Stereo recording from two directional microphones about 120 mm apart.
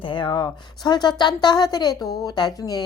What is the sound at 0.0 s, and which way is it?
A woman's voice, 45° left (ahead or behind).